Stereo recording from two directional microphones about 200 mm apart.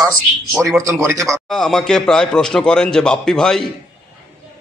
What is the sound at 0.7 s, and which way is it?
Speech, 15° right (ahead or behind).